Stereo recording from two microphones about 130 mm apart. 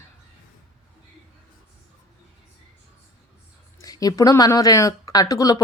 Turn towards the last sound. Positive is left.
turn(degrees=30)  # may be behind; listen again after turning